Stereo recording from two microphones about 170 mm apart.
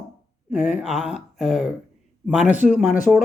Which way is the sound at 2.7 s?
45° left (ahead or behind).